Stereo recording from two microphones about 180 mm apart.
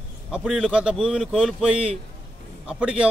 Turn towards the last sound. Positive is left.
turn(degrees=-5)  # may be behind; listen again after turning